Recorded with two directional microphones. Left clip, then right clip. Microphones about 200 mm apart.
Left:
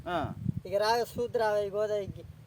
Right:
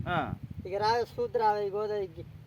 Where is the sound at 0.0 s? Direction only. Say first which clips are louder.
Right 1 dB; 30° right (ahead or behind).